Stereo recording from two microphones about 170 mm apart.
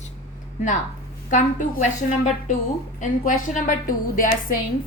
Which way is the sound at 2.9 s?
50° left (ahead or behind).